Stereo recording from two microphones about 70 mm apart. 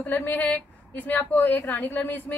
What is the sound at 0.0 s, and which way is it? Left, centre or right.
A woman's voice, left.